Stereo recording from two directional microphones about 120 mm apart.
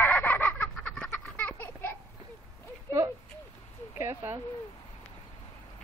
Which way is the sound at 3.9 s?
25° right (ahead or behind).